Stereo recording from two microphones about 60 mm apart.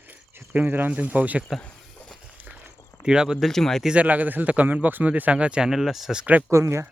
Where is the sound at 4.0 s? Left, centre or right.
Right.